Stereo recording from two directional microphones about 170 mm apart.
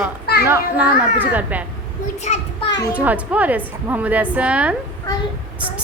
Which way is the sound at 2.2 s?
45° left (ahead or behind).